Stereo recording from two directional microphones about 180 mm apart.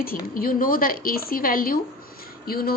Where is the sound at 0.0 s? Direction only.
55° left (ahead or behind).